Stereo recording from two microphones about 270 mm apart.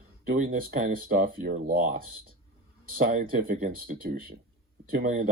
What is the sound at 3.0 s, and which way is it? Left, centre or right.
Speech, right.